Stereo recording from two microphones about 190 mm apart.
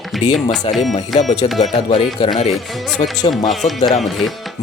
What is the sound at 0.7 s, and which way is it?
Speech, 30° left (ahead or behind).